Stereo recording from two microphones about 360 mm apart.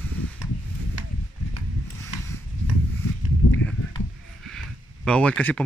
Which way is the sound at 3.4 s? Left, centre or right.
Left.